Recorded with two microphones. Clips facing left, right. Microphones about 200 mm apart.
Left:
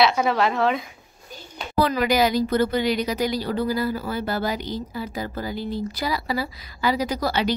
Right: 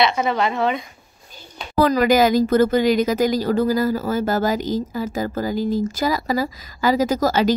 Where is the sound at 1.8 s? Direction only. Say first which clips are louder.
Right 5 dB; 45° right (ahead or behind).